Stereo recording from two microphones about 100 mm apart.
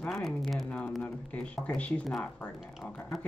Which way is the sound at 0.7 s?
15° left (ahead or behind).